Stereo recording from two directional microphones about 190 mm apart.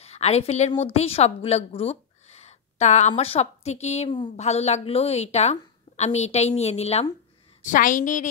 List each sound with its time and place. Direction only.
0.0 s a woman's voice: 35° left (ahead or behind)